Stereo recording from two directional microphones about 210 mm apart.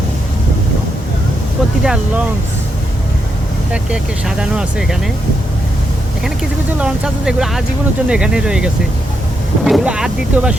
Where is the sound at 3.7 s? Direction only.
5° right (ahead or behind).